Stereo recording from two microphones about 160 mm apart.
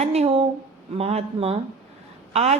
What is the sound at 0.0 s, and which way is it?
A woman's voice, 40° right (ahead or behind).